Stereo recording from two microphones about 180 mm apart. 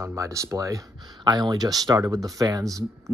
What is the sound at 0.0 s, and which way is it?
Speech, 15° right (ahead or behind).